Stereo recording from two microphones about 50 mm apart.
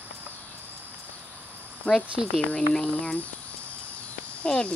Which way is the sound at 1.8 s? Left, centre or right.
Left.